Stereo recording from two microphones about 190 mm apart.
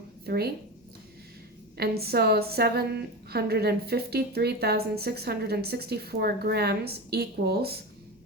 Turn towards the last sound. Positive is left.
turn(degrees=-55)  # may be behind; listen again after turning